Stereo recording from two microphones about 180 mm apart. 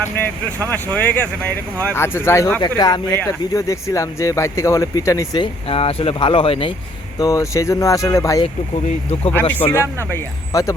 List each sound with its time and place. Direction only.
0.9 s speech: 10° left (ahead or behind); by 6.7 s 30° left (ahead or behind)
7.2 s speech: 20° left (ahead or behind)